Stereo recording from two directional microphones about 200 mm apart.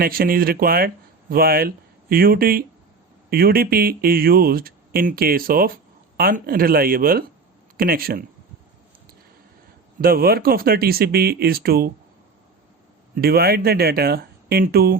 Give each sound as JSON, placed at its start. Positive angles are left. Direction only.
{"t": 0.0, "sound": "speech", "side_deg": -45}
{"t": 10.0, "sound": "speech", "side_deg": -45}
{"t": 13.1, "sound": "speech", "side_deg": -50}